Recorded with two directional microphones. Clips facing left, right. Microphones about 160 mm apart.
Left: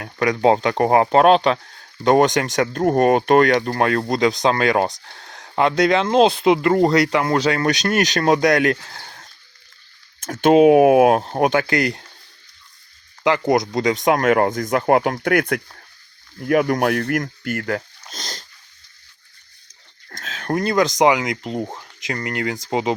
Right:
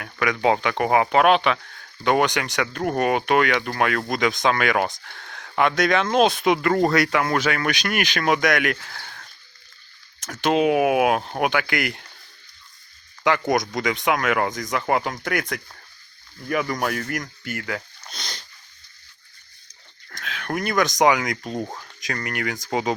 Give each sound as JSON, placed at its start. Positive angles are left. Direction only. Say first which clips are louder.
{"t": 0.0, "sound": "speech", "louder": "left 4 dB", "side_deg": 35}
{"t": 10.2, "sound": "speech", "louder": "left 8 dB", "side_deg": 50}
{"t": 13.5, "sound": "speech", "louder": "left 5 dB", "side_deg": 30}
{"t": 20.1, "sound": "speech", "louder": "left 5 dB", "side_deg": 40}